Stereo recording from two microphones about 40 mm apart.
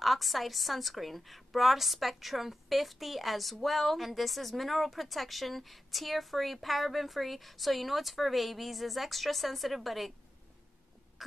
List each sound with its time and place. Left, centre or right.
0.0 s a woman's voice: centre
11.2 s cough: centre